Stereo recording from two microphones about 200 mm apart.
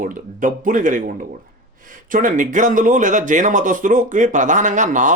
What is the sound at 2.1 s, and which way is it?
Speech, 40° right (ahead or behind).